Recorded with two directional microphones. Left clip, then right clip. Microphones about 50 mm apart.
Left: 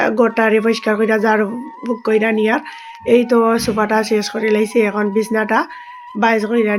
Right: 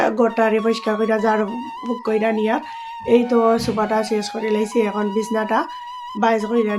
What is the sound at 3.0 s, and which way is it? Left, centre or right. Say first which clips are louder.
Speech: left 3 dB; left.